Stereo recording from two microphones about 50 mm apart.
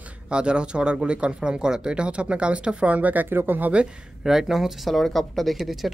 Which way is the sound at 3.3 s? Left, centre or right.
Right.